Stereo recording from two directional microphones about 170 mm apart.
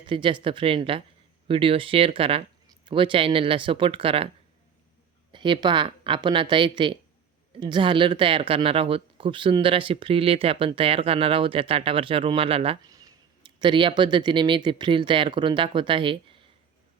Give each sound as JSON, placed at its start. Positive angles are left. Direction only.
{"t": 0.0, "sound": "speech", "side_deg": -30}
{"t": 5.3, "sound": "speech", "side_deg": -30}
{"t": 12.9, "sound": "a sound", "side_deg": -20}
{"t": 13.6, "sound": "speech", "side_deg": -30}